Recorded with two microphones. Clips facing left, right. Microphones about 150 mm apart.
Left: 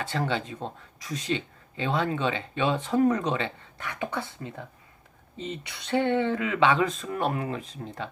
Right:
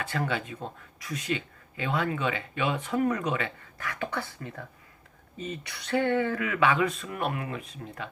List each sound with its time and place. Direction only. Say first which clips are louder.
0.1 s speech: left 2 dB; 30° left (ahead or behind)